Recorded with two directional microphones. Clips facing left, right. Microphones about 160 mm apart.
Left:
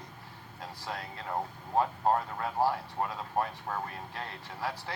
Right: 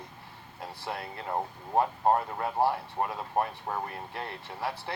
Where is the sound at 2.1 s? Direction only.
25° right (ahead or behind).